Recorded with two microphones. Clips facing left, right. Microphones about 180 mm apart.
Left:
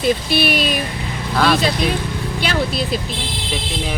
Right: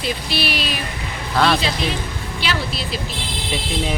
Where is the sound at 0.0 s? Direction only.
50° left (ahead or behind).